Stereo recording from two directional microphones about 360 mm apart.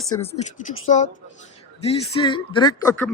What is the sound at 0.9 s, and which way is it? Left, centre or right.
Speech, left.